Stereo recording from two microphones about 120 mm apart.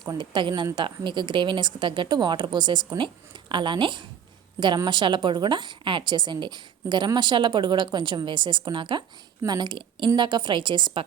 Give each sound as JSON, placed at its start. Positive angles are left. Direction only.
{"t": 0.0, "sound": "a woman's voice", "side_deg": -40}